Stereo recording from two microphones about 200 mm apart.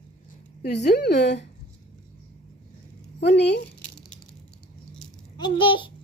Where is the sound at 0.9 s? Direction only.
55° left (ahead or behind).